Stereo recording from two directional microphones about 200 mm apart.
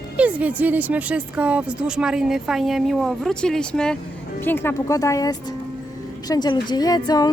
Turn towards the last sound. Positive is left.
turn(degrees=20)  # may be behind; listen again after turning